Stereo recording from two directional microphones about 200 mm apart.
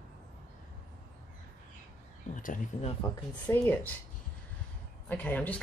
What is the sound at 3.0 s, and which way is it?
Speech, 10° left (ahead or behind).